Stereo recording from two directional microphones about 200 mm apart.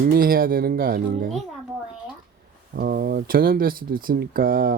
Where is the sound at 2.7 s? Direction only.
50° right (ahead or behind).